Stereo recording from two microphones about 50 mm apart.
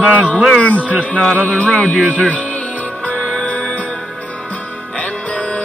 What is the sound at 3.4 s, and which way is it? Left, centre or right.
Music, left.